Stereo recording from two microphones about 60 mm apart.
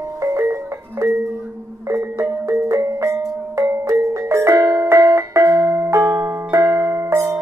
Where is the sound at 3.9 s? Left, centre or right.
Right.